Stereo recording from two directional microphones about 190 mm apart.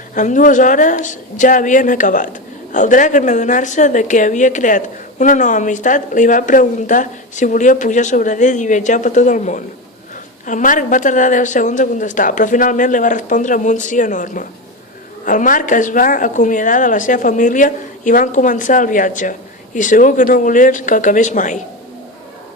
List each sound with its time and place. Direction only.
0.1 s speech: 40° left (ahead or behind)